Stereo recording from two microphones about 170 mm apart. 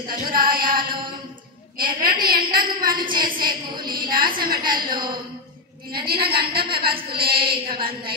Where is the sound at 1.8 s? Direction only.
55° right (ahead or behind).